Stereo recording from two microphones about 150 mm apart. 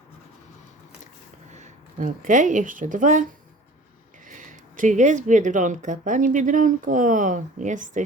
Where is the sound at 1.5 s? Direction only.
55° right (ahead or behind).